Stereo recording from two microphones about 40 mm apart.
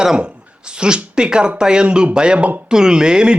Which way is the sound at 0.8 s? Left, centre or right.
Right.